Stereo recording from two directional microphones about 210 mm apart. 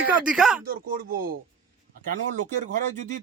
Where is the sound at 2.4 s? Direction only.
35° right (ahead or behind).